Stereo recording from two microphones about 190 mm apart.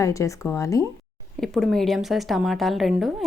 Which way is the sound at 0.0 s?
15° left (ahead or behind).